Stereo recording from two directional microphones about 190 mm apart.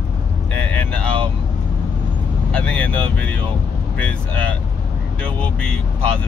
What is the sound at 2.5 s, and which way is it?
Speech, 5° left (ahead or behind).